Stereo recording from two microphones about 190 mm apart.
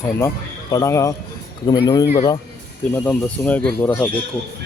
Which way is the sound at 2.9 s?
10° left (ahead or behind).